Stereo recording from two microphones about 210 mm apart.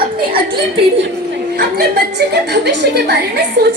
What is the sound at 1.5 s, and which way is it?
A woman's voice, 50° right (ahead or behind).